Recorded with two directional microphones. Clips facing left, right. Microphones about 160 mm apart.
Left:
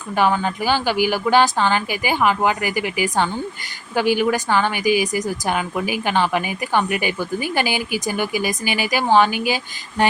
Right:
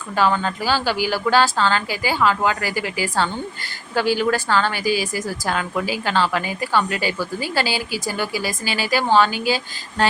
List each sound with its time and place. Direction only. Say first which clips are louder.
0.2 s a woman's voice: left 1 dB; 10° left (ahead or behind)